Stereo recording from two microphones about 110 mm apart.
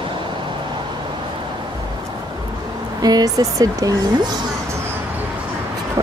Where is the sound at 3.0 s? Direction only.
35° right (ahead or behind).